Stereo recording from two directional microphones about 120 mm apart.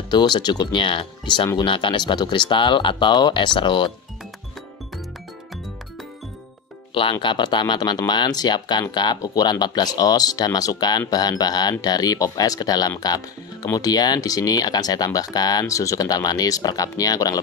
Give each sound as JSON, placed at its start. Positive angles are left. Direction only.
{"t": 0.1, "sound": "speech", "side_deg": 40}
{"t": 6.9, "sound": "speech", "side_deg": 45}